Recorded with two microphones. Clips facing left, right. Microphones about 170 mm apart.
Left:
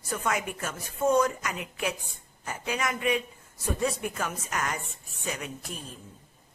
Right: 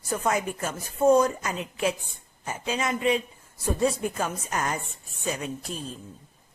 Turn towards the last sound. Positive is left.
turn(degrees=-30)  # may be behind; listen again after turning